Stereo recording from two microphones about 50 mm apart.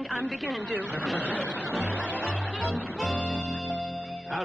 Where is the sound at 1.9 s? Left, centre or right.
Right.